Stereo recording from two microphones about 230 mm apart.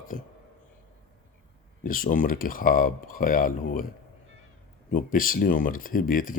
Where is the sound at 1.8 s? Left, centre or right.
Left.